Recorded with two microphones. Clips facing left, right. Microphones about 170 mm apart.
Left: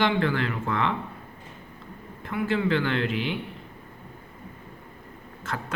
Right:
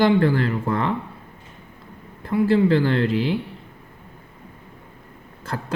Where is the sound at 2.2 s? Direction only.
35° right (ahead or behind).